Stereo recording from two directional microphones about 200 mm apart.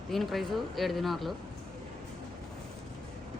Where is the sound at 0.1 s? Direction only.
Centre (ahead or behind).